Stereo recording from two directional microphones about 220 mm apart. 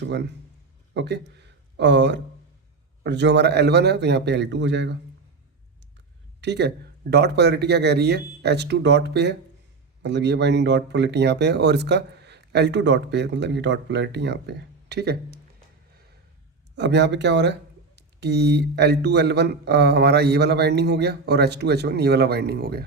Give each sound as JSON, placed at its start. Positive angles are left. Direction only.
{"t": 0.0, "sound": "speech", "side_deg": -50}
{"t": 6.4, "sound": "speech", "side_deg": -50}
{"t": 16.7, "sound": "speech", "side_deg": -50}